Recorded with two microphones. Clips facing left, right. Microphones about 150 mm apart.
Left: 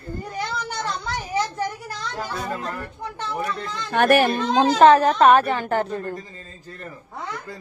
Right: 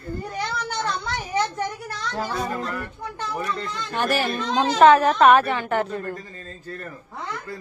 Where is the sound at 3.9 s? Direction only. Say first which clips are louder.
Left 7 dB; 60° left (ahead or behind).